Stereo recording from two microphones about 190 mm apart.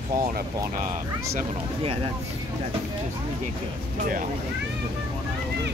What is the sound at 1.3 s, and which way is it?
Speech, 30° right (ahead or behind).